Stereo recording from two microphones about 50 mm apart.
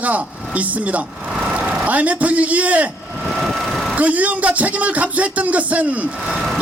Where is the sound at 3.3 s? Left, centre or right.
Centre.